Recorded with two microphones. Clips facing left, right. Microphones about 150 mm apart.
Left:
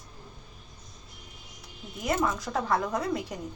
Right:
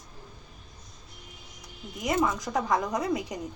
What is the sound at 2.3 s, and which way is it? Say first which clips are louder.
A woman's voice: right 1 dB; 15° right (ahead or behind).